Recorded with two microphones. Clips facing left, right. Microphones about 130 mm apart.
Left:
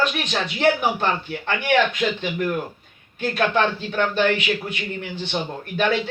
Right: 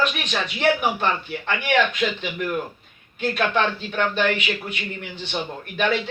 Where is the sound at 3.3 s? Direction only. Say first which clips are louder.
Left 2 dB; 35° left (ahead or behind).